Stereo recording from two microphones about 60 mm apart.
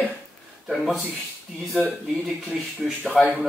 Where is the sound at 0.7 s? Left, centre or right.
Centre.